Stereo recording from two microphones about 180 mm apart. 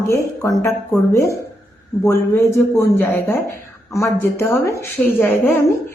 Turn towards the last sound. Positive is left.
turn(degrees=10)  # may be behind; listen again after turning